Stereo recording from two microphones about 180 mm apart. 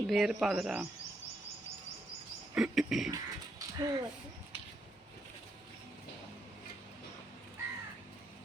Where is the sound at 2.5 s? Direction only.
5° right (ahead or behind).